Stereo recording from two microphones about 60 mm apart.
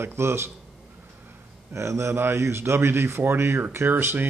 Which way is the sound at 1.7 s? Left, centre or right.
Right.